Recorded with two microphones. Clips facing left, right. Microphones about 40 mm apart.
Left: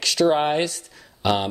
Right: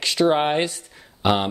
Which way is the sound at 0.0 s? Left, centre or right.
Centre.